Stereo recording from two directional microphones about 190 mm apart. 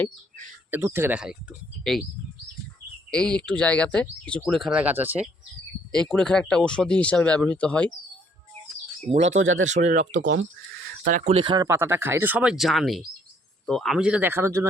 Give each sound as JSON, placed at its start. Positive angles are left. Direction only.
{"t": 0.7, "sound": "speech", "side_deg": -15}
{"t": 3.1, "sound": "speech", "side_deg": 5}
{"t": 5.9, "sound": "speech", "side_deg": 5}
{"t": 9.0, "sound": "speech", "side_deg": -35}
{"t": 9.3, "sound": "speech", "side_deg": -90}
{"t": 9.6, "sound": "speech", "side_deg": -40}
{"t": 10.2, "sound": "speech", "side_deg": -70}
{"t": 11.0, "sound": "speech", "side_deg": -45}
{"t": 11.3, "sound": "speech", "side_deg": -25}